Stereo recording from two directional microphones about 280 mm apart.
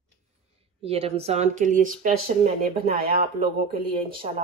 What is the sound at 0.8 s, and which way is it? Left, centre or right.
A woman's voice, right.